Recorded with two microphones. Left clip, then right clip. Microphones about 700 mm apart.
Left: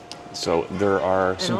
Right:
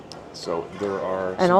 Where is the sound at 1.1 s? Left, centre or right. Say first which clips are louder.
Left 1 dB; left.